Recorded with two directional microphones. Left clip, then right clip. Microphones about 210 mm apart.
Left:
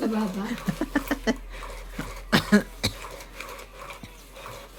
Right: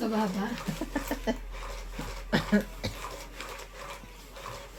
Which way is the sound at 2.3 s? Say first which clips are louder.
Left 6 dB; 40° left (ahead or behind).